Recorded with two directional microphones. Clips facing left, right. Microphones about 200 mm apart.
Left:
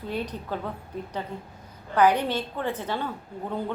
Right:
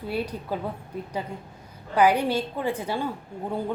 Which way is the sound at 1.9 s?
10° right (ahead or behind).